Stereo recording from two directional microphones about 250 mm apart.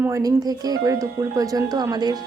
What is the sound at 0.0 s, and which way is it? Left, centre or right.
Speech, centre.